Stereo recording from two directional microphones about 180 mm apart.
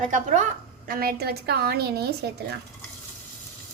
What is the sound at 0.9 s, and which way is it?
A woman's voice, 55° right (ahead or behind).